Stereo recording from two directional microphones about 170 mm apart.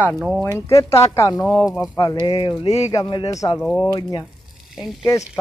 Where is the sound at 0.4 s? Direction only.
15° left (ahead or behind).